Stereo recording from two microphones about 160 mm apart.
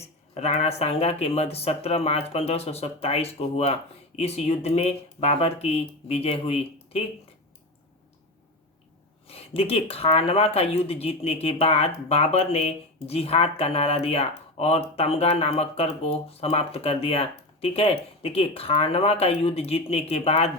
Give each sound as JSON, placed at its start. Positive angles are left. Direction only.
{"t": 0.0, "sound": "speech", "side_deg": 40}
{"t": 9.2, "sound": "speech", "side_deg": 40}